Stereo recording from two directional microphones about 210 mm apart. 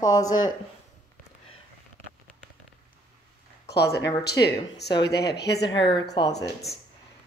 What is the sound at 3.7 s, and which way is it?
Speech, 50° left (ahead or behind).